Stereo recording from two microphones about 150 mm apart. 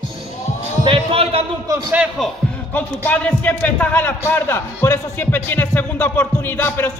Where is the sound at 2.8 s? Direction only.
10° left (ahead or behind).